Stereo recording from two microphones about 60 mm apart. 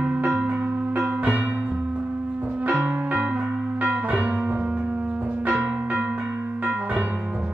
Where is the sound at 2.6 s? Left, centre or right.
Right.